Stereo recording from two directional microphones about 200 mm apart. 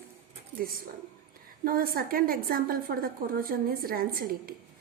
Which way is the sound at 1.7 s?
45° right (ahead or behind).